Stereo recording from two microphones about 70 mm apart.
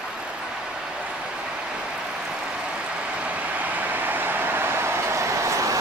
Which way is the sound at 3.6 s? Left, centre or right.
Right.